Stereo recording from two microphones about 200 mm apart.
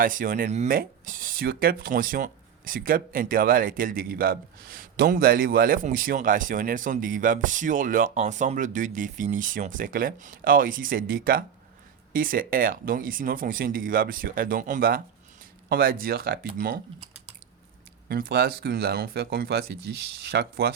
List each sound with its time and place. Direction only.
0.0 s speech: 45° right (ahead or behind)
18.1 s speech: 50° right (ahead or behind)